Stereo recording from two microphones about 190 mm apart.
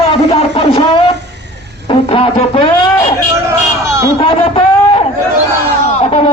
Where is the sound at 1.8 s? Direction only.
30° left (ahead or behind).